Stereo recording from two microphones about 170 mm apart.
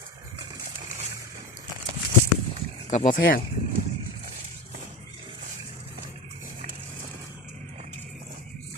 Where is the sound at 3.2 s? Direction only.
60° left (ahead or behind).